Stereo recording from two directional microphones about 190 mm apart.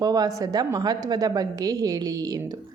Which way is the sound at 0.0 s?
20° right (ahead or behind).